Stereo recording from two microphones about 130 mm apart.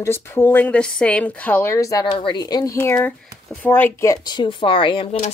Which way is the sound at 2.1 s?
35° left (ahead or behind).